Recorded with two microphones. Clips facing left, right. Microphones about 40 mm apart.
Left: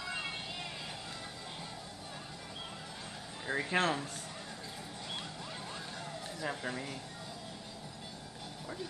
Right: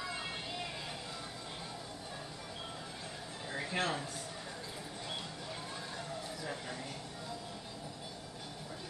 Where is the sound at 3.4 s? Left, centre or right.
Left.